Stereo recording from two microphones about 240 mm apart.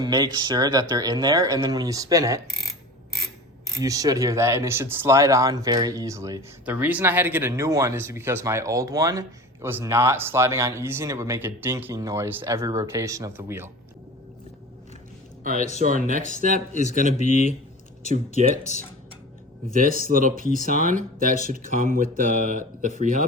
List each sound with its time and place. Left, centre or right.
0.0 s speech: centre
3.8 s speech: centre
15.5 s speech: left
15.8 s speech: right
17.2 s speech: left
19.7 s speech: right